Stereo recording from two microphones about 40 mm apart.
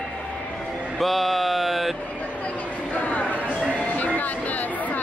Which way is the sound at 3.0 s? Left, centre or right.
Left.